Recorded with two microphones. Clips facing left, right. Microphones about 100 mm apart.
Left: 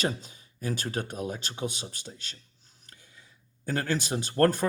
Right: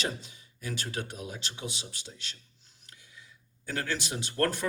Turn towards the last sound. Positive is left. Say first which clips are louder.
# left 6 dB
turn(degrees=45)  # may be behind; listen again after turning